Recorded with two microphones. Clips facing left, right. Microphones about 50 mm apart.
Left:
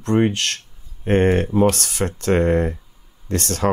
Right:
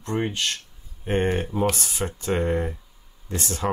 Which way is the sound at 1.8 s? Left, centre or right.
Left.